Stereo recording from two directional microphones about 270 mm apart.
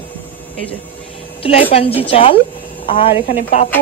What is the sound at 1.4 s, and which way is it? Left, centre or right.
A woman's voice, left.